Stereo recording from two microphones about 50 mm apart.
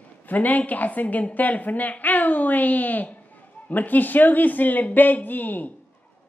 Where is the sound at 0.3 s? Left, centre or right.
Left.